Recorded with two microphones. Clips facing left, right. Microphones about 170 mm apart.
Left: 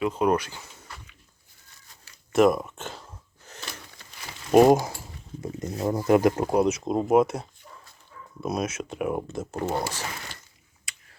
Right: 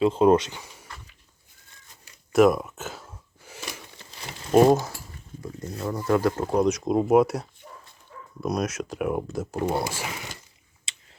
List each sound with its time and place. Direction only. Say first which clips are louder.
0.0 s speech: right 5 dB; 25° right (ahead or behind)
2.3 s gasp: right 1 dB; centre (ahead or behind)
4.5 s speech: left 1 dB; 15° left (ahead or behind)
9.6 s speech: right 1 dB; 10° right (ahead or behind)
10.9 s a sound: even; 25° right (ahead or behind)